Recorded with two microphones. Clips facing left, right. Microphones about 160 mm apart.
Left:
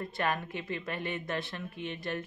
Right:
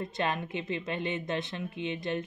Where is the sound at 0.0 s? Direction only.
20° right (ahead or behind).